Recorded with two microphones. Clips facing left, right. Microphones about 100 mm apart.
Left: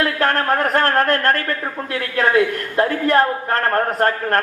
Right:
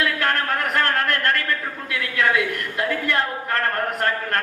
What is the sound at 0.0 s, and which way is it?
A man's voice, 40° left (ahead or behind).